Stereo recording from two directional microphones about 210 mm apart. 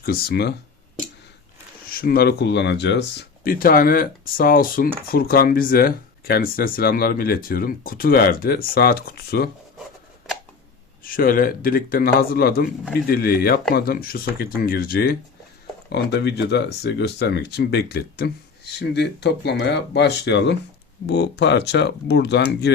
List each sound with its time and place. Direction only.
0.0 s speech: 45° left (ahead or behind)
1.9 s speech: 45° left (ahead or behind)
11.0 s speech: 45° left (ahead or behind)